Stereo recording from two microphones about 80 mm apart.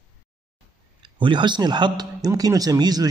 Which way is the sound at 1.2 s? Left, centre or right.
Right.